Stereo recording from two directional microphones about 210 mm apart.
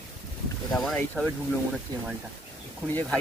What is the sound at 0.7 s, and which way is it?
Speech, 5° left (ahead or behind).